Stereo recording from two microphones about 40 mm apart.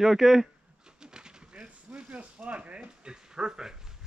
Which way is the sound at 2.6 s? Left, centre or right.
Right.